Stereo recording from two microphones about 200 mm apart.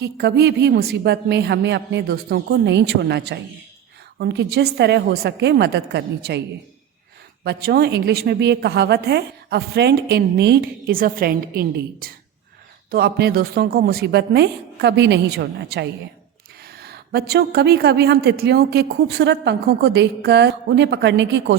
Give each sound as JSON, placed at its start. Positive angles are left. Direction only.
{"t": 0.0, "sound": "a woman's voice", "side_deg": -55}
{"t": 7.4, "sound": "a woman's voice", "side_deg": -55}